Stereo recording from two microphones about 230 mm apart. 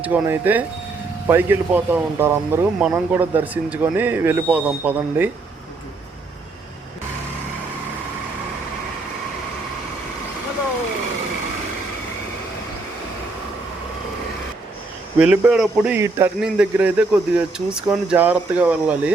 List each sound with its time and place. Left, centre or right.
0.0 s a man's voice: centre
15.2 s speech: centre